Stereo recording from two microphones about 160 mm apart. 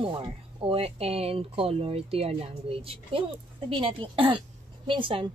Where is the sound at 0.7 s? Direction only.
35° right (ahead or behind).